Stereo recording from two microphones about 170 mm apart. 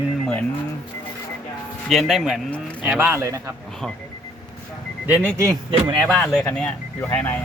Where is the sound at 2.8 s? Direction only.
10° right (ahead or behind).